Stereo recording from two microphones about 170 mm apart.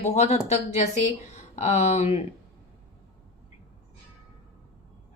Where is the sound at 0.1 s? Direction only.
40° left (ahead or behind).